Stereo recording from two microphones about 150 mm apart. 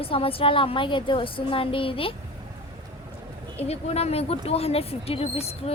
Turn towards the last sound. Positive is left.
turn(degrees=40)  # may be behind; listen again after turning